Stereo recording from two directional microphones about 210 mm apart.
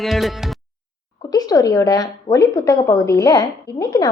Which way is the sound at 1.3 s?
15° left (ahead or behind).